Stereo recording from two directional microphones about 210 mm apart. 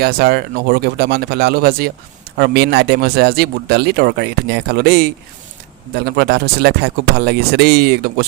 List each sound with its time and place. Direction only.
0.0 s speech: 50° right (ahead or behind)